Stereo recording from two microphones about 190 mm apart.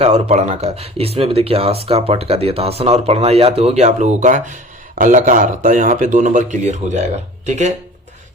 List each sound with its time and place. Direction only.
0.0 s a man's voice: 35° right (ahead or behind)